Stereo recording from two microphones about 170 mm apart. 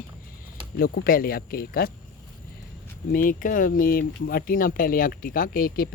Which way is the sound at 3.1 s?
50° left (ahead or behind).